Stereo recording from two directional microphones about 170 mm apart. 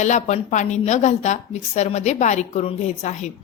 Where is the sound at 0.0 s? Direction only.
45° left (ahead or behind).